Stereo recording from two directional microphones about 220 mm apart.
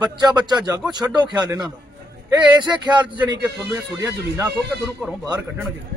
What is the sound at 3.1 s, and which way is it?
Speech, 20° right (ahead or behind).